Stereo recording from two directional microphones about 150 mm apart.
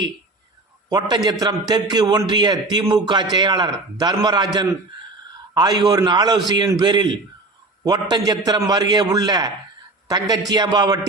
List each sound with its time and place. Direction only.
0.9 s a man's voice: 30° right (ahead or behind)